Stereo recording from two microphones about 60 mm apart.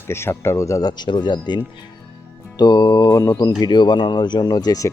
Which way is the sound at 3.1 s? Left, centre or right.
Left.